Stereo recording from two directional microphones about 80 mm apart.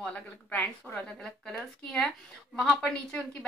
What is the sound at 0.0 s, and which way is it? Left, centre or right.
Speech, centre.